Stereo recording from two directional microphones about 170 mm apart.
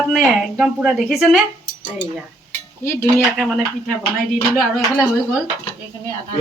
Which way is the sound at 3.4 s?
Centre (ahead or behind).